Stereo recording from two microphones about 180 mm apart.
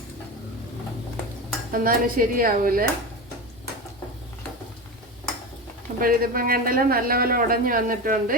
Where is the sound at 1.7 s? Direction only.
50° right (ahead or behind).